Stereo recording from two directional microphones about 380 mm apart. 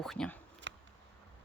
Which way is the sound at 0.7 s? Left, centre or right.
Right.